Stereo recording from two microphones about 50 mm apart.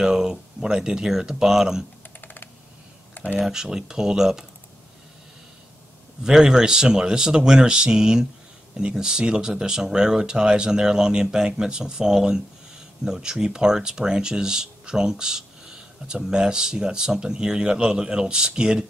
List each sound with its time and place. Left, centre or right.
0.0 s speech: centre
2.2 s computer keyboard: left
3.3 s speech: centre
6.2 s speech: centre